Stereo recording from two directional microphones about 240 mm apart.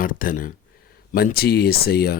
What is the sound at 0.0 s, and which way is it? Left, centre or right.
Speech, left.